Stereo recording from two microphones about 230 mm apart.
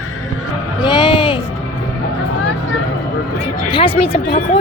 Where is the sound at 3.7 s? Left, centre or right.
Left.